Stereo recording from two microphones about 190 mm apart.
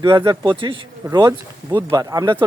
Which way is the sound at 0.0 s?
20° right (ahead or behind).